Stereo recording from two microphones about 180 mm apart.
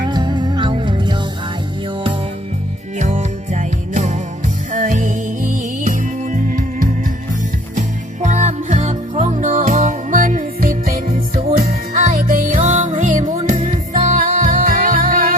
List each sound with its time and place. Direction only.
0.0 s music: 25° right (ahead or behind)
3.0 s music: 40° right (ahead or behind)
11.0 s music: 35° right (ahead or behind)
11.5 s music: 45° right (ahead or behind)